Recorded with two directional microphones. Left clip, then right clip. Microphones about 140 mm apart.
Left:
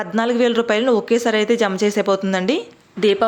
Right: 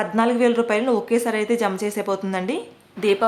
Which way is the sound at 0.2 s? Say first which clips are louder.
Left 2 dB; 30° left (ahead or behind).